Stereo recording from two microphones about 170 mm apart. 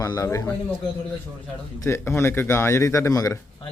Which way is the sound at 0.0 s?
20° left (ahead or behind).